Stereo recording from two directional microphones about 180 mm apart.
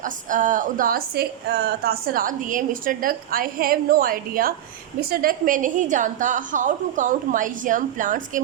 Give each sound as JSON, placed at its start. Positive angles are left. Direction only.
{"t": 0.0, "sound": "a woman's voice", "side_deg": -45}